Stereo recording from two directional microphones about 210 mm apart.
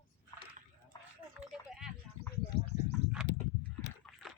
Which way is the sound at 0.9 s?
20° left (ahead or behind).